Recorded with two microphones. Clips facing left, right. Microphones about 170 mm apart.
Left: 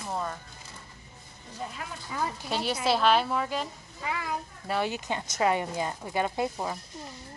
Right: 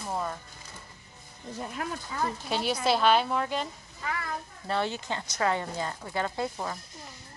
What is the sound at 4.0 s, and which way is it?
Speech, 15° left (ahead or behind).